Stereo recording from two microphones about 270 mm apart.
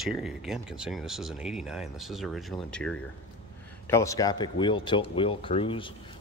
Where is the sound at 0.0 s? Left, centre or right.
Centre.